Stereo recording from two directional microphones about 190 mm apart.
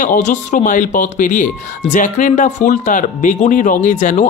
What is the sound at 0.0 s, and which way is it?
Speech, 40° left (ahead or behind).